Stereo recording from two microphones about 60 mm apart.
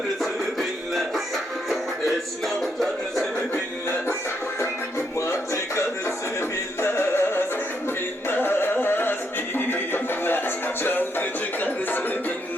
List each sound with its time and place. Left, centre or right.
0.6 s music: centre
6.8 s music: left
8.3 s a sound: left
9.6 s music: left